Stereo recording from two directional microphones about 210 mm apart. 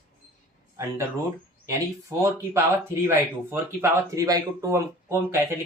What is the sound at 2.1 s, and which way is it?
Speech, 15° right (ahead or behind).